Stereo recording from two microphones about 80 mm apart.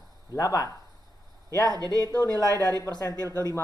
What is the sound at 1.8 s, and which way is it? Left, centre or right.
Speech, right.